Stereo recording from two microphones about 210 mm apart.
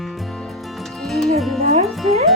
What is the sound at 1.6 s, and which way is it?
Music, 30° right (ahead or behind).